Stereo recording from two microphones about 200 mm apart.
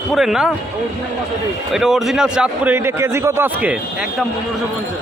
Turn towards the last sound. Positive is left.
turn(degrees=-10)  # may be behind; listen again after turning